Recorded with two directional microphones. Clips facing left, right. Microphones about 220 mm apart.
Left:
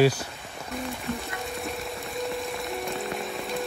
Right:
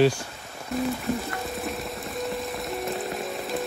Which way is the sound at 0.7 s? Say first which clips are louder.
Right 7 dB; centre (ahead or behind).